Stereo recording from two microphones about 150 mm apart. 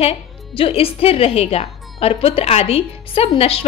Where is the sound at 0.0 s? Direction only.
40° left (ahead or behind).